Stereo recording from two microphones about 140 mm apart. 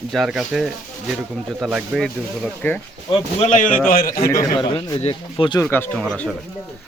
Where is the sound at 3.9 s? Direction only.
90° left.